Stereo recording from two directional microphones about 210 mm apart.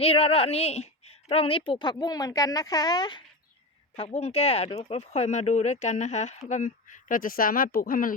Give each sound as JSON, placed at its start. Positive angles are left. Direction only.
{"t": 0.0, "sound": "speech", "side_deg": 25}